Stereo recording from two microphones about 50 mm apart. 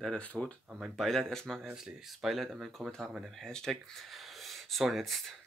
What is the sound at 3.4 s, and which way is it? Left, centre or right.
Speech, centre.